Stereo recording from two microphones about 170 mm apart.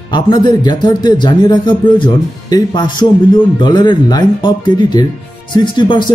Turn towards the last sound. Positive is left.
turn(degrees=25)  # may be behind; listen again after turning